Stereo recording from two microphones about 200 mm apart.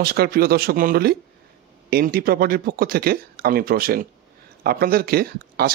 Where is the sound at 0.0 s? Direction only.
50° right (ahead or behind).